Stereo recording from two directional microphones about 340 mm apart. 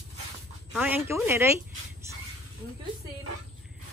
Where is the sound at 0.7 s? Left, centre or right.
Centre.